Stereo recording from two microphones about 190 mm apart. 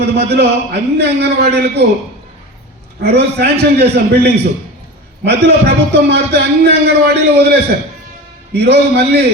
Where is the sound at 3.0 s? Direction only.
60° right (ahead or behind).